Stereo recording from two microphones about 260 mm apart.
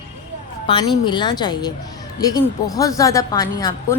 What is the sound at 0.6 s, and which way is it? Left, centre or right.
A woman's voice, centre.